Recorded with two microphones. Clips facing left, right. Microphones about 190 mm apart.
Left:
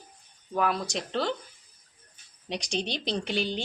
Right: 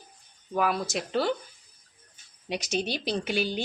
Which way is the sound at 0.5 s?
5° right (ahead or behind).